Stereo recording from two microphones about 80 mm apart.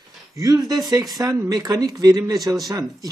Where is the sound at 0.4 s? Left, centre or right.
Right.